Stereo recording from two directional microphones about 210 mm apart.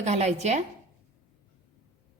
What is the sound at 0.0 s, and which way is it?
Speech, 30° right (ahead or behind).